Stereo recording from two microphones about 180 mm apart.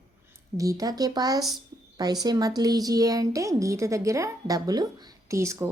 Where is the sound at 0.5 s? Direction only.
20° right (ahead or behind).